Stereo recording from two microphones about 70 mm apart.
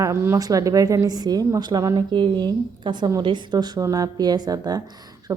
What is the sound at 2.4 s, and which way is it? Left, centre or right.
Speech, right.